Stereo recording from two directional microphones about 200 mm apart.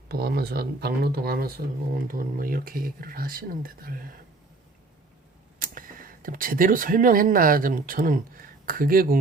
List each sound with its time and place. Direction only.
0.1 s speech: 50° right (ahead or behind)
5.5 s speech: 45° right (ahead or behind)